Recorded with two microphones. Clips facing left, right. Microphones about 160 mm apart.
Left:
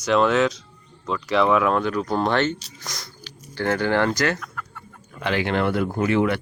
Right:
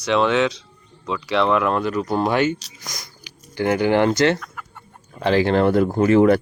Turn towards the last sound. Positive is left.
turn(degrees=-40)  # may be behind; listen again after turning